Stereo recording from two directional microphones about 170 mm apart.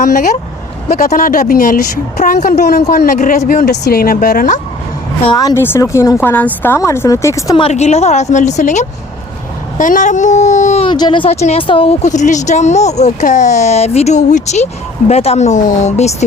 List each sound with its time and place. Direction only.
0.0 s speech: 50° left (ahead or behind)
3.7 s speech: 70° left (ahead or behind)
5.4 s speech: 15° left (ahead or behind)
7.5 s speech: 35° left (ahead or behind)
10.8 s speech: 25° left (ahead or behind)
12.0 s speech: 45° left (ahead or behind)